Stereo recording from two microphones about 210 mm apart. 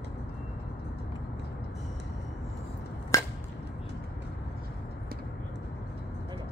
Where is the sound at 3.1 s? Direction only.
15° left (ahead or behind).